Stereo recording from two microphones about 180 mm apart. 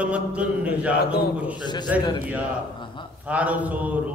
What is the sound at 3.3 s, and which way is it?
Speech, 10° right (ahead or behind).